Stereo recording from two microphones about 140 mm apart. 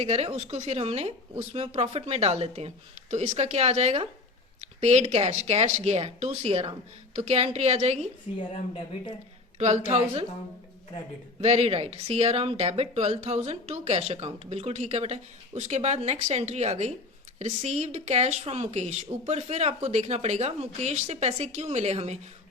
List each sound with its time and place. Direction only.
0.0 s speech: 50° right (ahead or behind)
9.6 s speech: 50° right (ahead or behind)
11.3 s speech: 45° right (ahead or behind)